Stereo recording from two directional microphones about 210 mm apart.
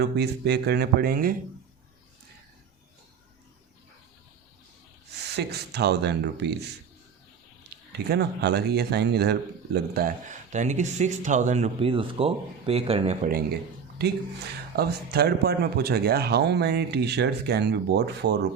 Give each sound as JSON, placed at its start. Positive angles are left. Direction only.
{"t": 0.0, "sound": "speech", "side_deg": -50}
{"t": 5.4, "sound": "speech", "side_deg": -50}
{"t": 7.9, "sound": "speech", "side_deg": -50}
{"t": 14.0, "sound": "speech", "side_deg": -50}